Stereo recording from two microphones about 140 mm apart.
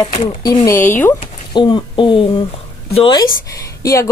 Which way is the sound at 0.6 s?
15° left (ahead or behind).